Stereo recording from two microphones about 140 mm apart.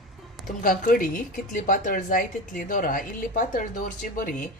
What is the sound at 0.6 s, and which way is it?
A woman's voice, 90° left.